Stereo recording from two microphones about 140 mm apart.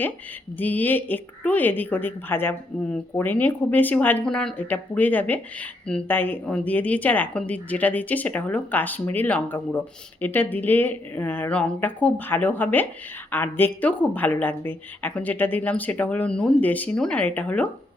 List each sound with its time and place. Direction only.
0.6 s a woman's voice: 10° left (ahead or behind)